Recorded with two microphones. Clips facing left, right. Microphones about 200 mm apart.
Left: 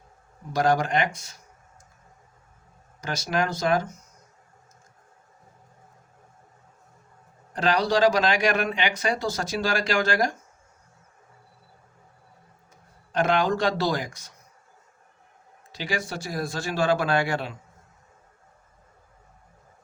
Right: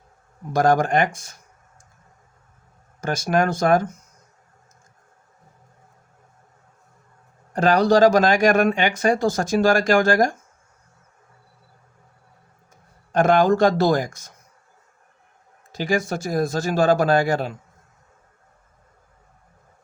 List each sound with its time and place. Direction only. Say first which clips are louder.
0.5 s speech: right 5 dB; 45° right (ahead or behind)
3.0 s speech: right 6 dB; 50° right (ahead or behind)
7.5 s speech: right 6 dB; 45° right (ahead or behind)
13.1 s speech: right 7 dB; 45° right (ahead or behind)
15.7 s speech: right 8 dB; 45° right (ahead or behind)